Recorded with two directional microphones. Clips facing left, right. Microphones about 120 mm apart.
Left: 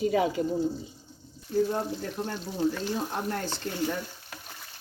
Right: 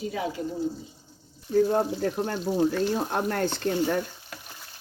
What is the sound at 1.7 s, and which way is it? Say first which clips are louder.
Speech: right 6 dB; 55° right (ahead or behind).